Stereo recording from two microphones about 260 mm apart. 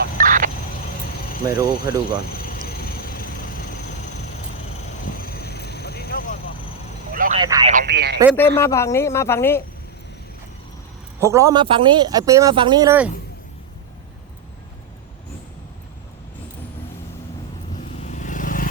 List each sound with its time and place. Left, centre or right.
0.0 s a sound: right
1.5 s a man's voice: centre
2.4 s vehicle: left
5.2 s vehicle: left
7.1 s vehicle: right
7.4 s a man's voice: centre
7.7 s speech: right
8.4 s speech: centre
11.2 s a man's voice: centre
17.9 s vehicle: left